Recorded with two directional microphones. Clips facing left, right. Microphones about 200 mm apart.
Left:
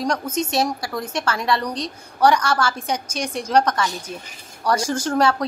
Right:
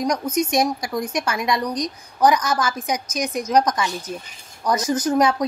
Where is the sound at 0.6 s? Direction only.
15° right (ahead or behind).